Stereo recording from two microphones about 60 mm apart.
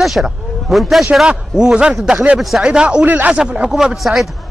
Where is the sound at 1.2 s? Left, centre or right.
Centre.